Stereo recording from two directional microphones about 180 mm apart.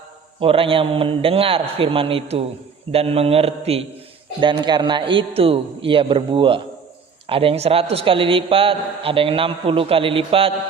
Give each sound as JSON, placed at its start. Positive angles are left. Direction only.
{"t": 0.3, "sound": "a man's voice", "side_deg": -30}